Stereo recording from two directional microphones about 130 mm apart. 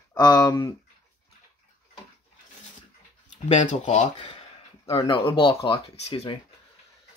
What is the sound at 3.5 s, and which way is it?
Speech, 65° left (ahead or behind).